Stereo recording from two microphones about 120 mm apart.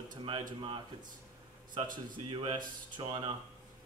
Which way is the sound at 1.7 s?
40° right (ahead or behind).